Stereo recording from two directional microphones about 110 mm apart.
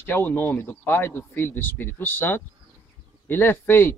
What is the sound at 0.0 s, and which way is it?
Speech, 20° left (ahead or behind).